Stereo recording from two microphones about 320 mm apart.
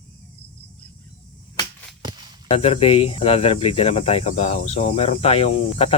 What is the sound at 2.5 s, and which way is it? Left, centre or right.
Speech, centre.